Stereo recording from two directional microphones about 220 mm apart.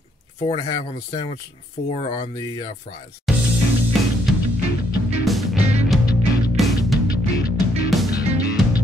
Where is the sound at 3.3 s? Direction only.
Centre (ahead or behind).